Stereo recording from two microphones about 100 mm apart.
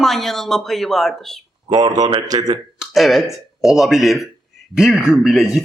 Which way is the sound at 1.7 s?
45° right (ahead or behind).